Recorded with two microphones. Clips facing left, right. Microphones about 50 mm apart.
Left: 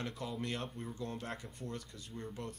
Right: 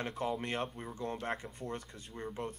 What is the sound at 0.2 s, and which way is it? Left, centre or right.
Speech, right.